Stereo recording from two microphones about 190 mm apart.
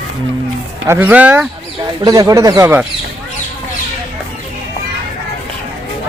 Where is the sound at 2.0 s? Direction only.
20° right (ahead or behind).